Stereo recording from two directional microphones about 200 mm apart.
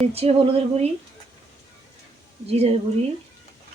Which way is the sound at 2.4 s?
30° right (ahead or behind).